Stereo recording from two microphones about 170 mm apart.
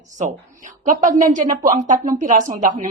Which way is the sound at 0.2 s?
45° right (ahead or behind).